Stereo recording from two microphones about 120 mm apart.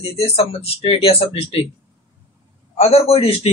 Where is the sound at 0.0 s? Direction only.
55° left (ahead or behind).